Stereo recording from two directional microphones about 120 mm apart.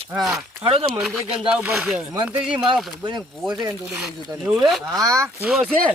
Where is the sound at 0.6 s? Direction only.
50° right (ahead or behind).